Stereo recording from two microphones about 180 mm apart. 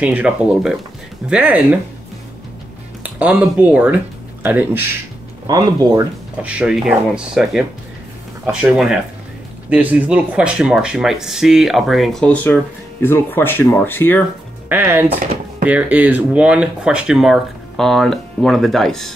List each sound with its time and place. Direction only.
0.0 s speech: 10° right (ahead or behind)
3.0 s speech: 10° right (ahead or behind)
6.4 s speech: 5° right (ahead or behind); by 14.2 s 10° left (ahead or behind)
14.7 s speech: 10° right (ahead or behind)